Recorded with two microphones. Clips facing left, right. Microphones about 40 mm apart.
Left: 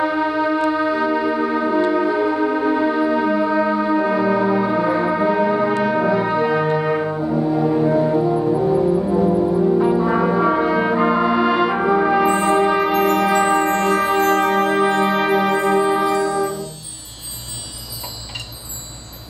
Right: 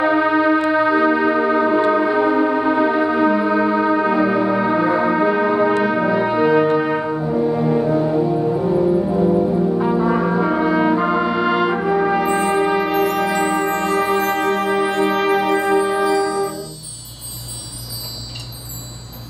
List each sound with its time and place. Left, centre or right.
0.0 s music: centre
7.8 s music: centre
11.9 s brass instrument: centre
12.4 s music: centre
14.8 s music: centre
15.7 s music: centre
16.1 s music: left